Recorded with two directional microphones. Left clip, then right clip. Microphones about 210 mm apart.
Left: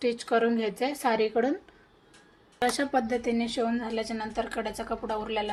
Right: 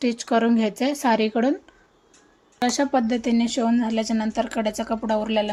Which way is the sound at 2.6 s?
35° right (ahead or behind).